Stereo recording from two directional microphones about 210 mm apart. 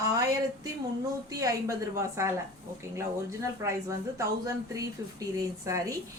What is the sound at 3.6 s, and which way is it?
Speech, 15° right (ahead or behind).